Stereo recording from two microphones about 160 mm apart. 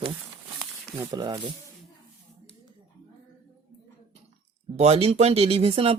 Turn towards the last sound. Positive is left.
turn(degrees=-40)  # may be behind; listen again after turning